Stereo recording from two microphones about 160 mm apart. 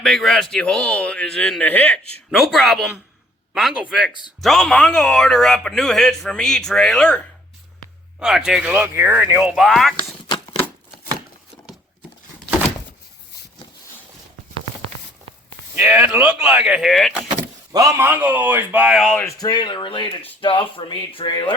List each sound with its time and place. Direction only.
0.0 s speech: centre (ahead or behind)
10.2 s a sound: 30° left (ahead or behind)
15.7 s speech: 10° right (ahead or behind)
17.3 s speech: 20° right (ahead or behind)
19.0 s speech: 10° left (ahead or behind)
19.4 s speech: 25° left (ahead or behind)